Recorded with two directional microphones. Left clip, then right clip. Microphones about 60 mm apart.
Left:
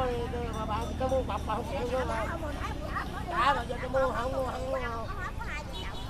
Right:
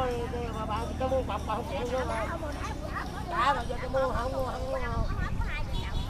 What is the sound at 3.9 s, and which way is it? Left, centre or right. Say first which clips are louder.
Speech: even; left.